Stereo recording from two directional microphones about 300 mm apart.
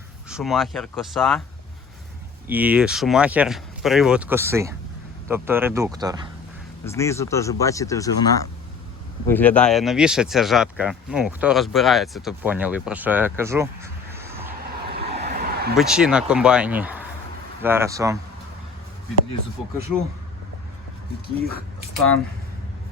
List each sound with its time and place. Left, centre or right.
0.3 s speech: centre
2.5 s speech: centre
6.8 s speech: centre
14.8 s vehicle: right
15.8 s speech: centre